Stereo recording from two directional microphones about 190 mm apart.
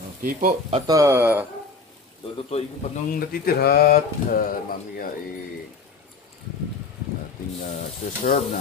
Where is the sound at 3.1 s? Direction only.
50° left (ahead or behind).